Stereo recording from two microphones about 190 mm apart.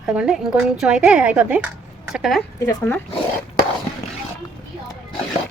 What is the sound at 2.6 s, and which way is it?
Speech, 10° left (ahead or behind).